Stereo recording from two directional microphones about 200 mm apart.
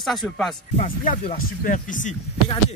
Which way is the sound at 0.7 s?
35° left (ahead or behind).